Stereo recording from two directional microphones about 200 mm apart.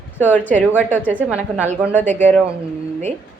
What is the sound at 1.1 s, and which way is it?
Speech, 5° right (ahead or behind).